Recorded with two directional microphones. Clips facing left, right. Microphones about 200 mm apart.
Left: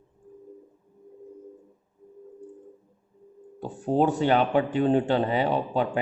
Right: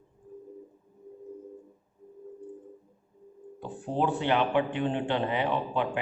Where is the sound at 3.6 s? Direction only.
40° left (ahead or behind).